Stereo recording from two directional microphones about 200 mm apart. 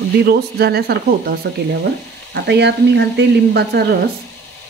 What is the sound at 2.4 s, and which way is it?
Speech, 55° right (ahead or behind).